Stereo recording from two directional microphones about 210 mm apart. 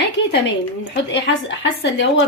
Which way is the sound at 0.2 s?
60° left (ahead or behind).